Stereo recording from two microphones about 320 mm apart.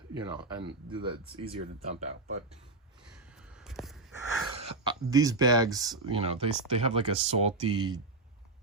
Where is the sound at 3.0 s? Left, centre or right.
Centre.